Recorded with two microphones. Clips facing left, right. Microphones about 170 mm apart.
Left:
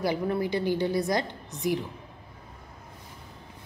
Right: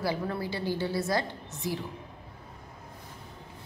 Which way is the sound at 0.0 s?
20° left (ahead or behind).